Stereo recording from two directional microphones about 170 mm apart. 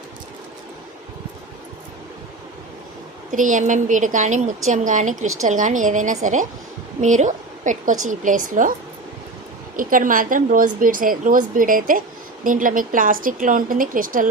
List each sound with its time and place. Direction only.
3.3 s a woman's voice: 50° right (ahead or behind)
9.7 s a woman's voice: 55° right (ahead or behind)